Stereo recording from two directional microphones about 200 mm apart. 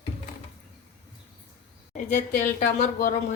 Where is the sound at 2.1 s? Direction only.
40° left (ahead or behind).